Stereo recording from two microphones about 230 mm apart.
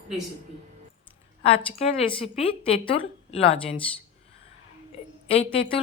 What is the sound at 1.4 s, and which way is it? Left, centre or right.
A woman's voice, left.